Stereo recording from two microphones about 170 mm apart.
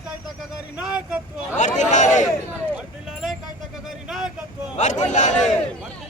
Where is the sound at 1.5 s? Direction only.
45° left (ahead or behind).